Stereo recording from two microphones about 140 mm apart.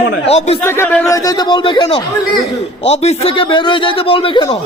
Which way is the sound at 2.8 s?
50° left (ahead or behind).